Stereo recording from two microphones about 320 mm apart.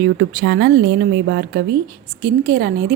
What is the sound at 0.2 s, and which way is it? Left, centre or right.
Speech, right.